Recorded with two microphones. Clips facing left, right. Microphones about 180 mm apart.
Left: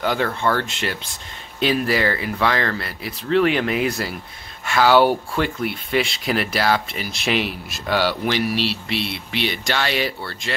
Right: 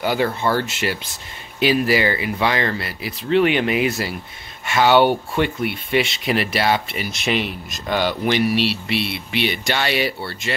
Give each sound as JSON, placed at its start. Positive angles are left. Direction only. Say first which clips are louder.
{"t": 0.0, "sound": "speech", "louder": "right 1 dB", "side_deg": -5}